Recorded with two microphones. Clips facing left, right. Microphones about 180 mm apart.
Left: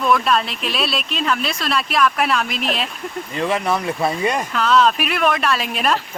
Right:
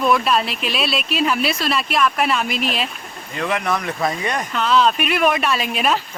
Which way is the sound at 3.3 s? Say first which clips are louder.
Left 1 dB; 30° left (ahead or behind).